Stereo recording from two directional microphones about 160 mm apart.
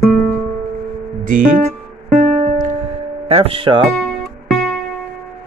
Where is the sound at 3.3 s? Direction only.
40° right (ahead or behind).